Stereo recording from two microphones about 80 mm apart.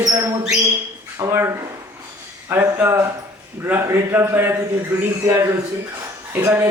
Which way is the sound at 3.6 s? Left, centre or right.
Right.